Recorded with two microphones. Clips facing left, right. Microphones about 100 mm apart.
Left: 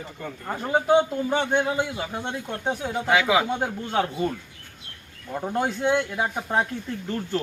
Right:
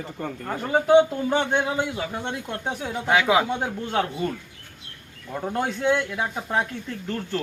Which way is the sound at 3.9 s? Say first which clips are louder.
Left 1 dB; 15° left (ahead or behind).